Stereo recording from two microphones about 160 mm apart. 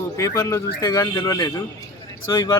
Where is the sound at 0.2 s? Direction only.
20° left (ahead or behind).